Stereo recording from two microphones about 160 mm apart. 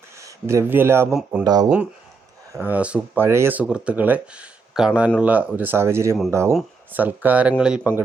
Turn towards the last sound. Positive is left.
turn(degrees=-5)  # may be behind; listen again after turning